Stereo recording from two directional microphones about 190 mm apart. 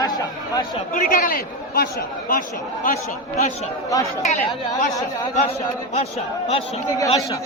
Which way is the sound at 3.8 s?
15° left (ahead or behind).